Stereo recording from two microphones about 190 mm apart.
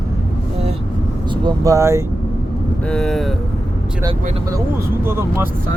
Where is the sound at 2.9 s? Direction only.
5° left (ahead or behind).